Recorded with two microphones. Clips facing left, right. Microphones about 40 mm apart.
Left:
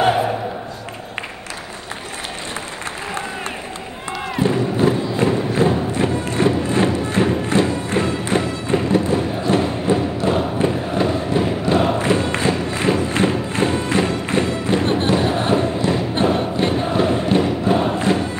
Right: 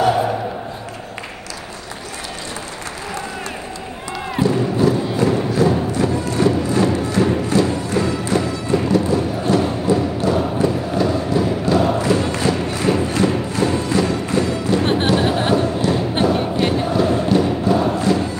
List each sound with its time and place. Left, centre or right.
4.4 s music: left
10.6 s a sound: left
12.0 s thump: left
13.1 s music: left
14.8 s music: right
15.0 s a sound: right
15.5 s thump: left
16.2 s music: left
16.8 s chant: left